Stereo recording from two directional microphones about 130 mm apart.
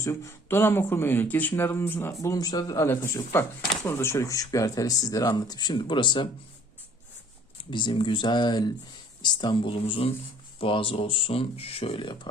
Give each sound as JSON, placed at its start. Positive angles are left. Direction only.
{"t": 0.0, "sound": "speech", "side_deg": 25}
{"t": 2.2, "sound": "speech", "side_deg": 30}
{"t": 2.8, "sound": "speech", "side_deg": 20}
{"t": 7.6, "sound": "speech", "side_deg": 35}